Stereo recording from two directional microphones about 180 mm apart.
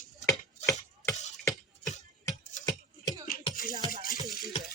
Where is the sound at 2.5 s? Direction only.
45° left (ahead or behind).